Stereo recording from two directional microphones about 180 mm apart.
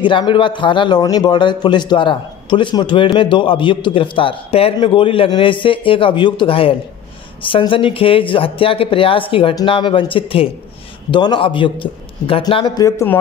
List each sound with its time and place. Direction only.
0.0 s a man's voice: 25° left (ahead or behind)